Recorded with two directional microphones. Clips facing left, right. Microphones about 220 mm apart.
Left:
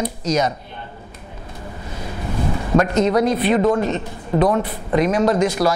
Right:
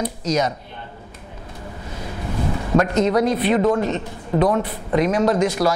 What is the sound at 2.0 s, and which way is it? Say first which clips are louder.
Speech: left 1 dB; 25° left (ahead or behind).